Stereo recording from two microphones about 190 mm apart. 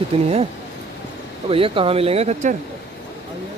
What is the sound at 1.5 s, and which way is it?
Speech, 30° right (ahead or behind).